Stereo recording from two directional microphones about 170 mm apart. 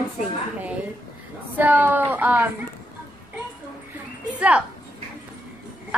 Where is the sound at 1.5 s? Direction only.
10° right (ahead or behind).